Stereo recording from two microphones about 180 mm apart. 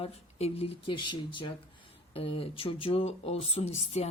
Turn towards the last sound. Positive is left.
turn(degrees=35)  # may be behind; listen again after turning